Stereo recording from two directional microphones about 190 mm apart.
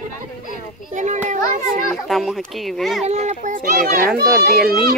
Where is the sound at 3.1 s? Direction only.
35° right (ahead or behind).